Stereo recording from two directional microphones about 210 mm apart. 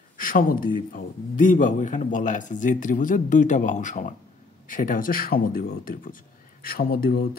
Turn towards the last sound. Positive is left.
turn(degrees=45)  # may be behind; listen again after turning